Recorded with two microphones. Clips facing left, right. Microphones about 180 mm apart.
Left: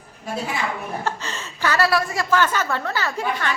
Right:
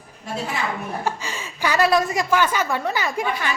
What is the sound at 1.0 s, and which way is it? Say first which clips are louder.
A woman's voice: right 1 dB; 10° right (ahead or behind).